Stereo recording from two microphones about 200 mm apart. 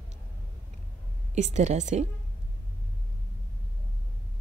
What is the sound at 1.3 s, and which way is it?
Speech, 35° right (ahead or behind).